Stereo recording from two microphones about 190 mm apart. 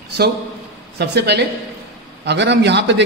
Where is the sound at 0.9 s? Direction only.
60° right (ahead or behind).